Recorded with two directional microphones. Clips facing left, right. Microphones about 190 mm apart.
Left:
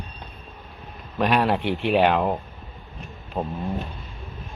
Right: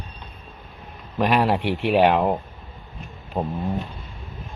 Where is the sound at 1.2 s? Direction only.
10° right (ahead or behind).